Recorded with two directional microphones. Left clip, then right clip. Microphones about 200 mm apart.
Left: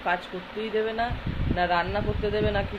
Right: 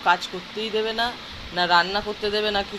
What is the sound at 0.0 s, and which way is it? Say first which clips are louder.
Speech: right 7 dB; centre (ahead or behind).